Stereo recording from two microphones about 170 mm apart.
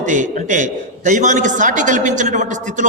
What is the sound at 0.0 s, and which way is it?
A man's voice, 45° right (ahead or behind).